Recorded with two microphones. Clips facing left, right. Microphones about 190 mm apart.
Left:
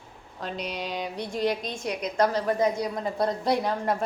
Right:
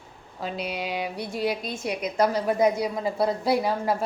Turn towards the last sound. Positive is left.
turn(degrees=-5)  # may be behind; listen again after turning